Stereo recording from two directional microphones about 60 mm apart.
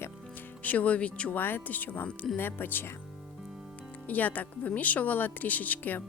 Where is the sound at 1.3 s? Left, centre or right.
Left.